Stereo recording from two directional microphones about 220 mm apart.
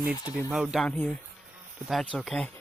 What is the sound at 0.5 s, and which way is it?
Speech, 5° right (ahead or behind).